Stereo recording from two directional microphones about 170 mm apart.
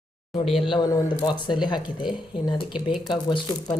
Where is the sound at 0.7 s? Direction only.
25° left (ahead or behind).